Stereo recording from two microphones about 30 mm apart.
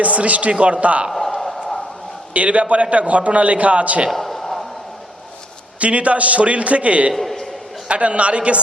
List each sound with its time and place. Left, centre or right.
0.0 s a man's voice: right
1.1 s a sound: centre
2.3 s a man's voice: right
4.1 s a sound: centre
5.8 s a man's voice: right
7.1 s a man's voice: centre
7.9 s a man's voice: right